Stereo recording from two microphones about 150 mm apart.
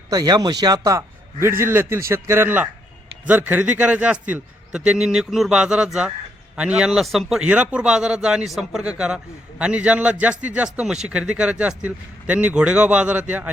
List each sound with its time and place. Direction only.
0.1 s a man's voice: 25° right (ahead or behind); by 13.5 s 10° right (ahead or behind)